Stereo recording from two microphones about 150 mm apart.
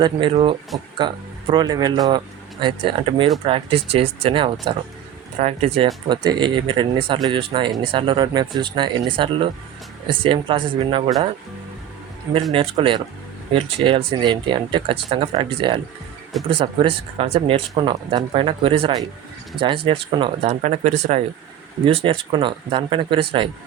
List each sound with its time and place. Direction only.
0.0 s speech: 35° right (ahead or behind)
6.1 s speech: 30° right (ahead or behind)
12.5 s speech: 35° right (ahead or behind)
20.5 s speech: 50° right (ahead or behind)
21.8 s speech: 40° right (ahead or behind)